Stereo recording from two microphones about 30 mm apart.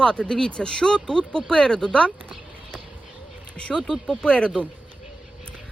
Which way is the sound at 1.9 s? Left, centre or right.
Left.